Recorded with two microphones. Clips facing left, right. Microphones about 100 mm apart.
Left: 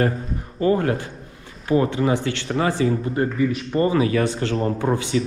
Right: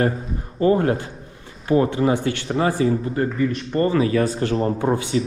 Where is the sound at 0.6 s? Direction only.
30° right (ahead or behind).